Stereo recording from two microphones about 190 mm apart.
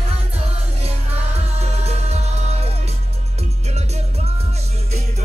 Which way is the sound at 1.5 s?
35° right (ahead or behind).